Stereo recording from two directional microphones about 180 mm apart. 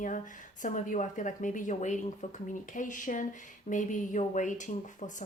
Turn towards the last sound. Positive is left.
turn(degrees=45)  # may be behind; listen again after turning